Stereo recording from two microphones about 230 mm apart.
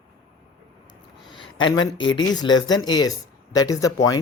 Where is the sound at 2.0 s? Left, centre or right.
Left.